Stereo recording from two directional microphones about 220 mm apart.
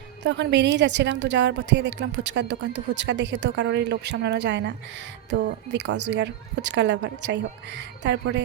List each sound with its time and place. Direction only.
0.2 s a woman's voice: 50° right (ahead or behind)